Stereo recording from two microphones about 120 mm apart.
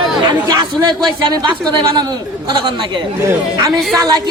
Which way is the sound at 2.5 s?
40° right (ahead or behind).